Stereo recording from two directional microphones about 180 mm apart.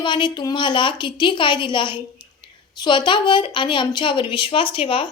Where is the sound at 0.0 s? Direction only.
25° left (ahead or behind).